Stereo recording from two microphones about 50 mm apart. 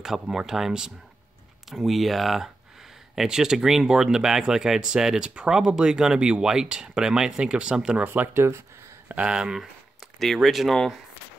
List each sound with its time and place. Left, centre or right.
0.0 s speech: centre
8.0 s speech: right
9.1 s speech: right
10.1 s speech: centre